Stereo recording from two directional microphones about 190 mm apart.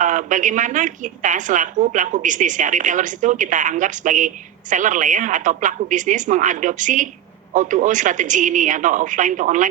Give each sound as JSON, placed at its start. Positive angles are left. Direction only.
{"t": 0.0, "sound": "a woman's voice", "side_deg": -40}